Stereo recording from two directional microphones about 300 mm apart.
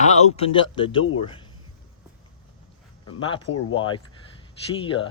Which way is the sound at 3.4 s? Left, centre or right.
Left.